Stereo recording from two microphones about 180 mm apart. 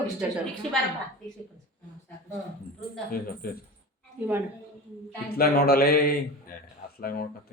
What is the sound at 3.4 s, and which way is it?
Speech, 55° left (ahead or behind).